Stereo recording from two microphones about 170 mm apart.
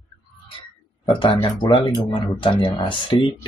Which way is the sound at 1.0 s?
30° left (ahead or behind).